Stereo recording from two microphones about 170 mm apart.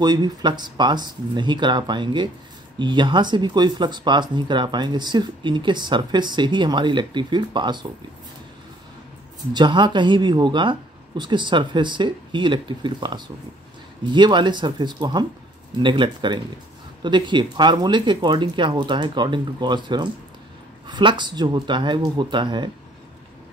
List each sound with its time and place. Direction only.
0.0 s speech: 25° right (ahead or behind)
9.5 s speech: 25° right (ahead or behind)